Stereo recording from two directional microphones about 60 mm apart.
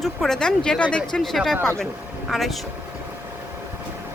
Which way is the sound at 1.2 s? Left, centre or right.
Centre.